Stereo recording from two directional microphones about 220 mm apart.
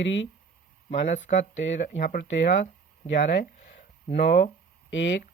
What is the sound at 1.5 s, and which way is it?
Speech, 55° left (ahead or behind).